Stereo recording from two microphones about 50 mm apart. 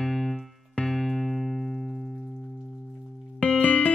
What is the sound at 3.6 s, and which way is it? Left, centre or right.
Music, left.